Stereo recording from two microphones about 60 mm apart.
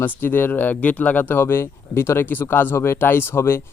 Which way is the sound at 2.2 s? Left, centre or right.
Left.